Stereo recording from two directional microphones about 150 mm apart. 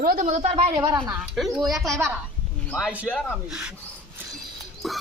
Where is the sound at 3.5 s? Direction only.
5° right (ahead or behind).